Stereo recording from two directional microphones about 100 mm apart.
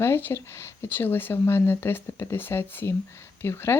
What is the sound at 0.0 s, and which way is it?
Speech, 20° left (ahead or behind).